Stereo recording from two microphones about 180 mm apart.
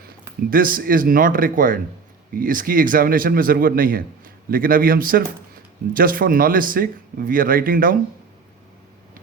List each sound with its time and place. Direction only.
0.5 s speech: 50° right (ahead or behind)